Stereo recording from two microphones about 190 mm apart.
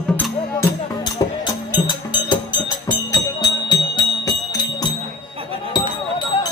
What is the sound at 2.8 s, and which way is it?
Music, 20° left (ahead or behind).